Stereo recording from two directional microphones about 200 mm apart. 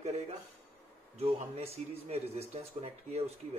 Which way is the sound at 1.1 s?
30° right (ahead or behind).